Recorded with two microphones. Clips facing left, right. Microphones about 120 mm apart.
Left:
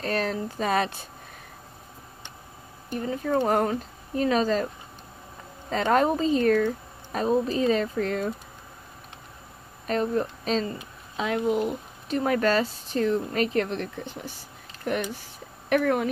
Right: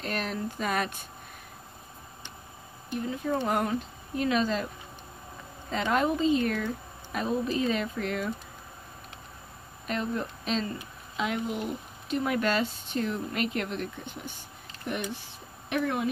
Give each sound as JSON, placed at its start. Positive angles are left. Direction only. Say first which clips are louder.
{"t": 0.0, "sound": "speech", "louder": "left 5 dB", "side_deg": 35}
{"t": 2.9, "sound": "speech", "louder": "left 4 dB", "side_deg": 45}
{"t": 5.7, "sound": "speech", "louder": "left 4 dB", "side_deg": 40}
{"t": 9.8, "sound": "speech", "louder": "left 6 dB", "side_deg": 40}